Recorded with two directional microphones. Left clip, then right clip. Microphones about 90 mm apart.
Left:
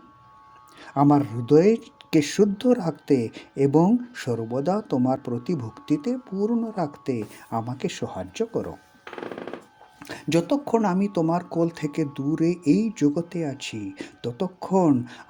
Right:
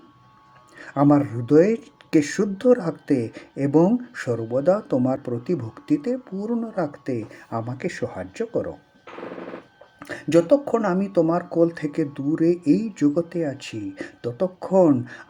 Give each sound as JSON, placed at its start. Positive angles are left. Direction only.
{"t": 0.8, "sound": "speech", "side_deg": 45}
{"t": 10.0, "sound": "speech", "side_deg": 70}